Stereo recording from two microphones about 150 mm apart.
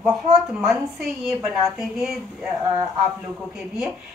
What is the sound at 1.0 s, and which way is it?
A man's voice, centre (ahead or behind).